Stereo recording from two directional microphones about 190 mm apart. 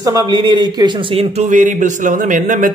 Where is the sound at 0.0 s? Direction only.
20° right (ahead or behind).